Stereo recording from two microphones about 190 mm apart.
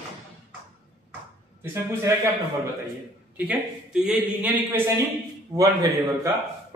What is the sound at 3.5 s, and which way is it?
A man's voice, 5° right (ahead or behind).